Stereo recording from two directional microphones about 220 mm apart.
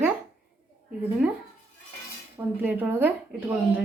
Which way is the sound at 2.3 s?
10° right (ahead or behind).